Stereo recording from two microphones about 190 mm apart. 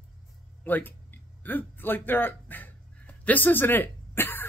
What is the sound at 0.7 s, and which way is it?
Speech, 10° left (ahead or behind).